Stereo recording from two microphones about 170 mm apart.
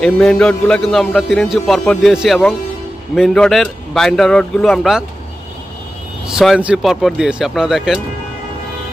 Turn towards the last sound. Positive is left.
turn(degrees=0)  # may be behind; listen again after turning